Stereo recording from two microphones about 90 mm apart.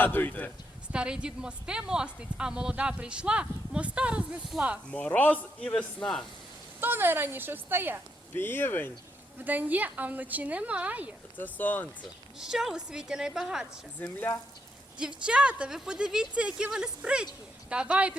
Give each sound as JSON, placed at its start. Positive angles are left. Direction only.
{"t": 0.0, "sound": "speech", "side_deg": 20}
{"t": 0.9, "sound": "speech", "side_deg": -10}
{"t": 4.9, "sound": "a man's voice", "side_deg": 15}
{"t": 6.7, "sound": "speech", "side_deg": -25}
{"t": 8.3, "sound": "speech", "side_deg": 25}
{"t": 9.4, "sound": "speech", "side_deg": -20}
{"t": 11.3, "sound": "speech", "side_deg": 20}
{"t": 12.4, "sound": "speech", "side_deg": -5}
{"t": 14.0, "sound": "a man's voice", "side_deg": 20}
{"t": 14.9, "sound": "speech", "side_deg": -10}